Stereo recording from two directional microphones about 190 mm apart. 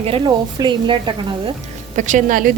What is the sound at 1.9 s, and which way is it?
Speech, 40° right (ahead or behind).